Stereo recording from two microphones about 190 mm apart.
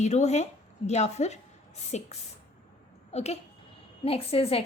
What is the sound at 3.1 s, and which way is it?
A woman's voice, 35° left (ahead or behind).